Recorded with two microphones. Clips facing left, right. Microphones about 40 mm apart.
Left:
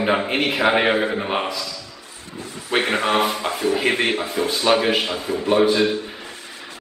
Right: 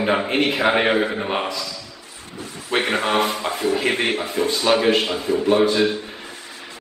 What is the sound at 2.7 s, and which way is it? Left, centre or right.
Speech, left.